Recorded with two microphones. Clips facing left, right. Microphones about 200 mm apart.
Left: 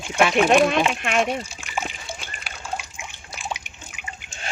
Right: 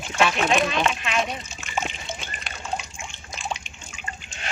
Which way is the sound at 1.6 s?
5° left (ahead or behind).